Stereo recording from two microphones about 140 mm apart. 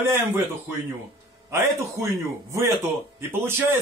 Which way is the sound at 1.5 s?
20° right (ahead or behind).